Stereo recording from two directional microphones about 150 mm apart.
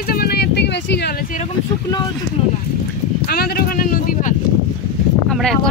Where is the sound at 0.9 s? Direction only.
90° left.